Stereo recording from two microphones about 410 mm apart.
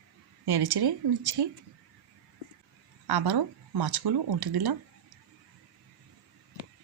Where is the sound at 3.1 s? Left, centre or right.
Right.